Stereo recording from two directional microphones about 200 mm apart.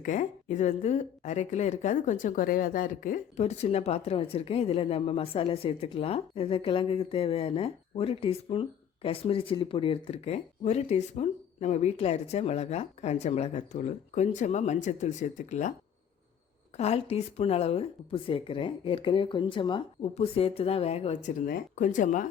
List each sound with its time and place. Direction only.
0.0 s a woman's voice: 40° left (ahead or behind)
16.7 s speech: 30° left (ahead or behind)